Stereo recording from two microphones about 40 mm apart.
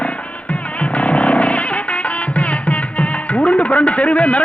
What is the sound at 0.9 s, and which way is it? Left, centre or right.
Music, left.